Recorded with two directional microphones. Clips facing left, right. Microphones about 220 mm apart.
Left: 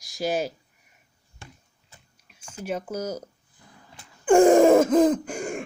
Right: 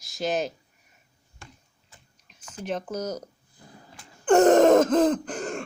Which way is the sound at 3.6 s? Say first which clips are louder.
Right 4 dB; 35° right (ahead or behind).